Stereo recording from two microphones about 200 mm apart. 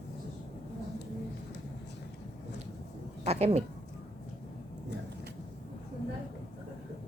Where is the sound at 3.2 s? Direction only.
30° right (ahead or behind).